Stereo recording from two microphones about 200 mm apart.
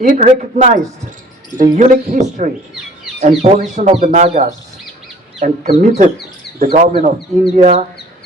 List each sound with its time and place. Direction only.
0.0 s speech: 40° right (ahead or behind)